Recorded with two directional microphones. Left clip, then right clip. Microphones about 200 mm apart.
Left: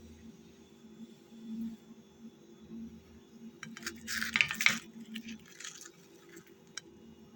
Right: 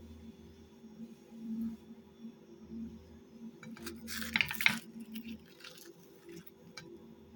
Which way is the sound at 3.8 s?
30° right (ahead or behind).